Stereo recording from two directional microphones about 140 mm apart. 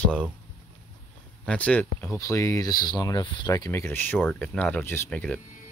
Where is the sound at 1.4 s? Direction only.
10° left (ahead or behind).